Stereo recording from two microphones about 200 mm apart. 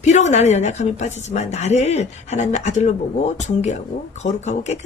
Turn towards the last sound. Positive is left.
turn(degrees=35)  # may be behind; listen again after turning